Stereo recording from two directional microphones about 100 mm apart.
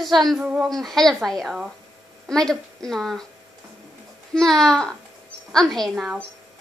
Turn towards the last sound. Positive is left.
turn(degrees=5)  # may be behind; listen again after turning